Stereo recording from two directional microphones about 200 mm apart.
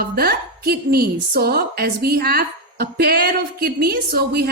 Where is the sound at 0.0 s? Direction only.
50° right (ahead or behind).